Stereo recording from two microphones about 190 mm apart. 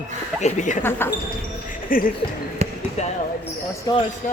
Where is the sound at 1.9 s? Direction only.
45° left (ahead or behind).